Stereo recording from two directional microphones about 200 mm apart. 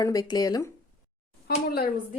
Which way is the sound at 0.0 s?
20° left (ahead or behind).